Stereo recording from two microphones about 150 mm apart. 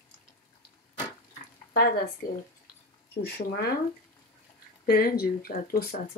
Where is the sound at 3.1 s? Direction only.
90° left.